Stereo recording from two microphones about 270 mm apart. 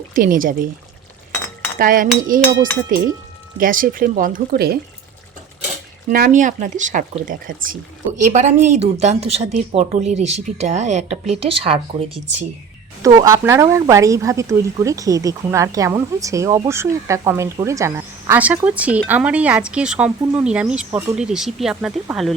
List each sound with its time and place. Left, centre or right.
0.1 s speech: right
1.8 s speech: right
6.1 s a woman's voice: right; by 22.4 s centre